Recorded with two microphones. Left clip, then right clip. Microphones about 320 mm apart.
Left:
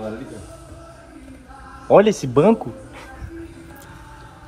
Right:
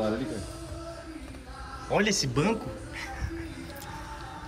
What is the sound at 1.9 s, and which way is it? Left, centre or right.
Speech, centre.